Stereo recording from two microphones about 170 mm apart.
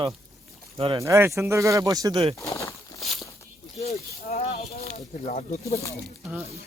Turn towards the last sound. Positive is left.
turn(degrees=40)  # may be behind; listen again after turning